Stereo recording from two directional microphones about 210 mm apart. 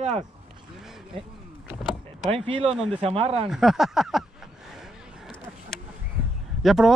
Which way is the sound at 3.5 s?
Centre (ahead or behind).